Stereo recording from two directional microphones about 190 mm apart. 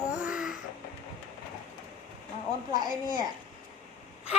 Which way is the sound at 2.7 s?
20° right (ahead or behind).